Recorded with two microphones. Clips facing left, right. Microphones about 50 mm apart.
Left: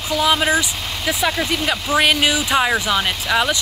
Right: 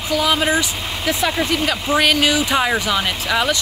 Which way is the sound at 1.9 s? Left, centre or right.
Centre.